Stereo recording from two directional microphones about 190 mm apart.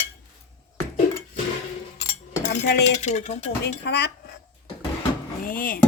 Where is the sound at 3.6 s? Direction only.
60° left (ahead or behind).